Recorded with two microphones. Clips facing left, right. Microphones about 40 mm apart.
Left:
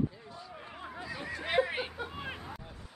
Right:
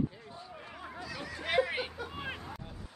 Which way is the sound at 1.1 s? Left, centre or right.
Left.